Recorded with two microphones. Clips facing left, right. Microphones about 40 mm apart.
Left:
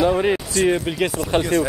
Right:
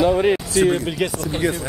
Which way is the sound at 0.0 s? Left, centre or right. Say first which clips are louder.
Right 1 dB; centre.